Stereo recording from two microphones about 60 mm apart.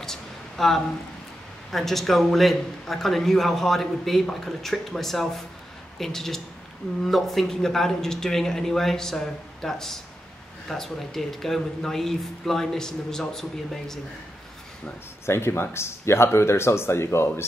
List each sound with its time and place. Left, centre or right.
0.0 s a sound: centre
1.7 s a man's voice: centre
15.2 s speech: left